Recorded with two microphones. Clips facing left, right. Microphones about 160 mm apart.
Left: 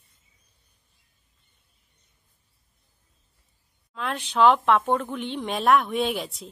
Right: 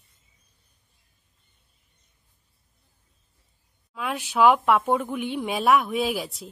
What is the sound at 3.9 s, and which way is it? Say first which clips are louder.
A woman's voice: even; 10° right (ahead or behind).